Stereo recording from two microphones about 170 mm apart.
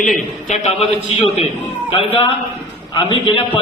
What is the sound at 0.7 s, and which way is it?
Speech, 35° left (ahead or behind).